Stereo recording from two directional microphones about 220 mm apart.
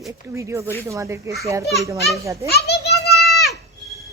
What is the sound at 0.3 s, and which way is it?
A child's voice, 15° right (ahead or behind).